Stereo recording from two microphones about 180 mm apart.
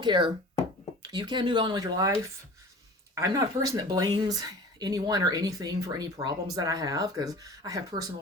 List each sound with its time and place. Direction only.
0.0 s speech: 25° right (ahead or behind)
3.2 s speech: 20° right (ahead or behind)